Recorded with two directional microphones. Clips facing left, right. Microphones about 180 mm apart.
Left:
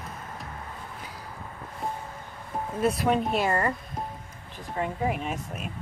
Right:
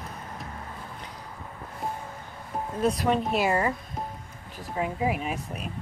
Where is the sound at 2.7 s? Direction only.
5° left (ahead or behind).